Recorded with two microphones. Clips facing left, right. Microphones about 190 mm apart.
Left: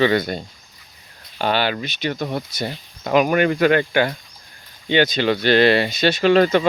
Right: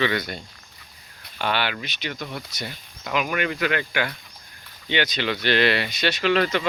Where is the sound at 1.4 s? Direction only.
35° left (ahead or behind).